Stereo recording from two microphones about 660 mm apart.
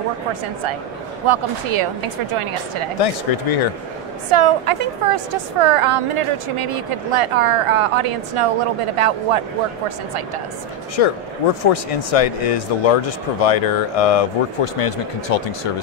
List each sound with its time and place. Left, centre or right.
1.2 s a woman's voice: right
3.0 s speech: left
4.3 s a woman's voice: right
11.0 s speech: left